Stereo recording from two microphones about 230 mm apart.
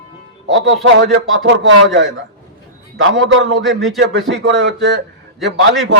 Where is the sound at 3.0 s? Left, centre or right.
Right.